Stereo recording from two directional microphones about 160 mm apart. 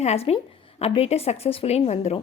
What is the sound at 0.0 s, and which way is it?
Speech, 40° left (ahead or behind).